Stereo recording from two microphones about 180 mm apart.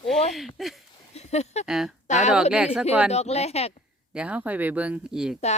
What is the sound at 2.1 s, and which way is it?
Speech, 40° left (ahead or behind).